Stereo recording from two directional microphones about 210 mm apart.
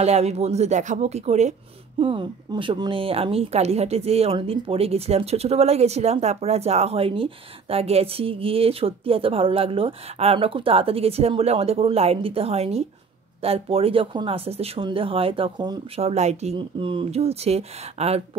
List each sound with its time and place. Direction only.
0.0 s speech: 30° right (ahead or behind)